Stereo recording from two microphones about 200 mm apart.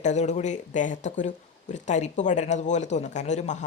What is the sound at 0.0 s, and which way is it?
Speech, 35° left (ahead or behind).